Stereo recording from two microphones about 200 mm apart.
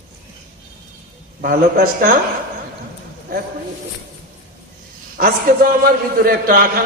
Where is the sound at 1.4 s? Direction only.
45° right (ahead or behind).